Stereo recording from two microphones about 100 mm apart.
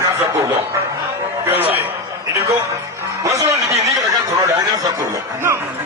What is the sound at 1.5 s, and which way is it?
Speech, 20° right (ahead or behind).